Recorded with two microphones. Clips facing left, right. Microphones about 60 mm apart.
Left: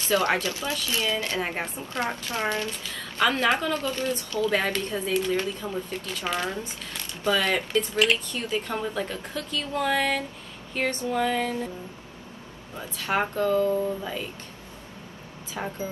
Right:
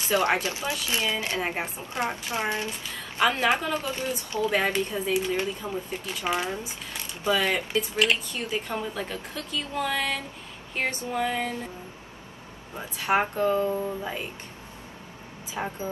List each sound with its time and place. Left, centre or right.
0.1 s a woman's voice: right
1.4 s speech: centre
2.0 s a woman's voice: centre
10.7 s speech: centre
12.7 s a woman's voice: right
15.6 s speech: centre